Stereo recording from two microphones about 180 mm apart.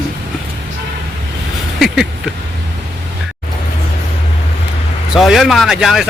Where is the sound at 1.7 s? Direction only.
Centre (ahead or behind).